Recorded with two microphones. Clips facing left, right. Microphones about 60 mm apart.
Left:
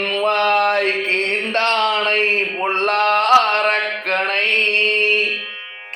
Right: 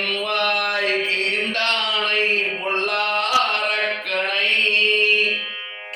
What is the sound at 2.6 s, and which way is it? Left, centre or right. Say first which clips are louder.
Mantra: left 5 dB; left.